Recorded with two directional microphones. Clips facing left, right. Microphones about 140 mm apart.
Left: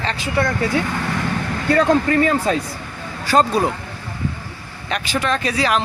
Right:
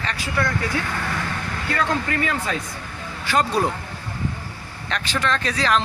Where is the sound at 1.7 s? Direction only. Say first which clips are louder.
Left 8 dB; 35° left (ahead or behind).